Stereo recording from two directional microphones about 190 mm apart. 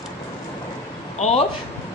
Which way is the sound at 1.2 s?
35° left (ahead or behind).